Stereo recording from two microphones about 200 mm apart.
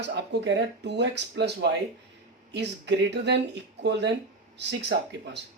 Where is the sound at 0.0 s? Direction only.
60° right (ahead or behind).